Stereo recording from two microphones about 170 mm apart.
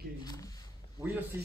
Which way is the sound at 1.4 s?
10° right (ahead or behind).